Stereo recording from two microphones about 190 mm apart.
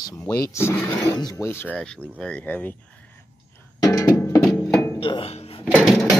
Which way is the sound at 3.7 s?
20° left (ahead or behind).